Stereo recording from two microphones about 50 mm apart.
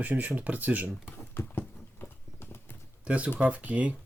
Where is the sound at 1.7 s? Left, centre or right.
Left.